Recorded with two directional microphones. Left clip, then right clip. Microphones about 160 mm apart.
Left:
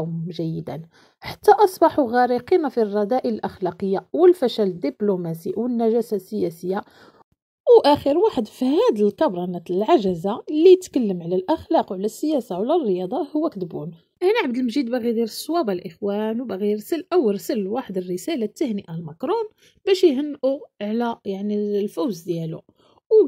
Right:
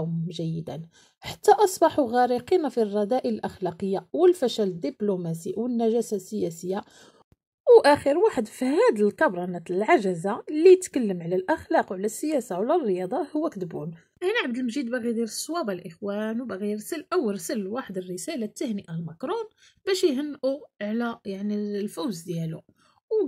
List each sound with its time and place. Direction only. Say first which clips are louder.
0.0 s a woman's voice: left 4 dB; 15° left (ahead or behind)
7.6 s speech: left 2 dB; 45° left (ahead or behind)
11.9 s a woman's voice: left 4 dB; 5° left (ahead or behind)
12.5 s speech: left 2 dB; 35° left (ahead or behind)
22.2 s speech: left 7 dB; 35° left (ahead or behind)